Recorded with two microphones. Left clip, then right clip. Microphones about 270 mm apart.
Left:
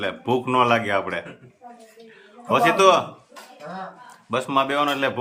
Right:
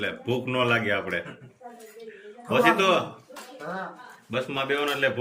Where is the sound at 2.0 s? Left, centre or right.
Centre.